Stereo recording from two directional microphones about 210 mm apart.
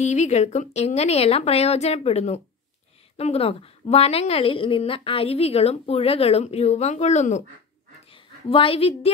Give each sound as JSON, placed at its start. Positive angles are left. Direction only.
{"t": 0.0, "sound": "a woman's voice", "side_deg": 35}